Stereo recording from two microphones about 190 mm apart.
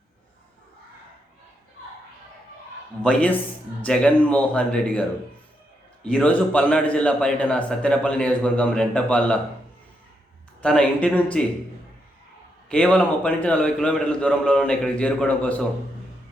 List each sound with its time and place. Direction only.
3.0 s a man's voice: 5° left (ahead or behind)
6.1 s a man's voice: 5° left (ahead or behind)
10.6 s a man's voice: 5° left (ahead or behind)
12.6 s a man's voice: 5° left (ahead or behind)